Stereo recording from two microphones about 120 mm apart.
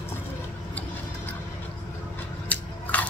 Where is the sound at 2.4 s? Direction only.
10° left (ahead or behind).